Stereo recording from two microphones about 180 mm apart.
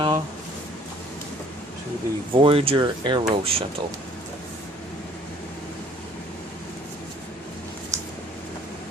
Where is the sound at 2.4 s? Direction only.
30° right (ahead or behind).